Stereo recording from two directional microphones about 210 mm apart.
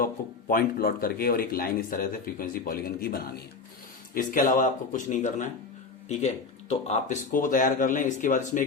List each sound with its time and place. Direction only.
0.0 s speech: 45° left (ahead or behind)